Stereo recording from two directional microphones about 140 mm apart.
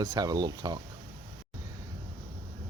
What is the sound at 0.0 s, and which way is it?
Speech, 25° right (ahead or behind).